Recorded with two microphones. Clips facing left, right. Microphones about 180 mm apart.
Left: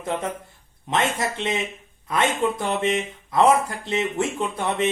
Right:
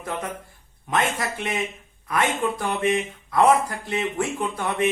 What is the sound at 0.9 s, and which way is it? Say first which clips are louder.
Speech: left 1 dB; 25° left (ahead or behind).